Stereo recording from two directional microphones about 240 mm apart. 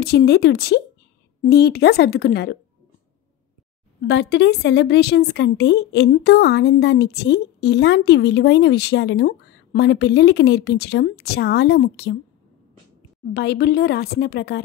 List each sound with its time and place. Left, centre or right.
0.0 s a woman's voice: left
4.0 s a woman's voice: left
13.2 s a woman's voice: left